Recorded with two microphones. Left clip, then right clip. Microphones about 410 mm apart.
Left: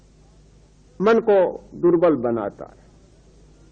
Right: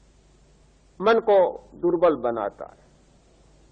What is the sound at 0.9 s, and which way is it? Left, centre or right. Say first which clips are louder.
A man's voice: left 2 dB; centre.